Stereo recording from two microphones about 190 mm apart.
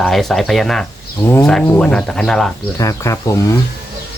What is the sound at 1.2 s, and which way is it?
Speech, 15° left (ahead or behind).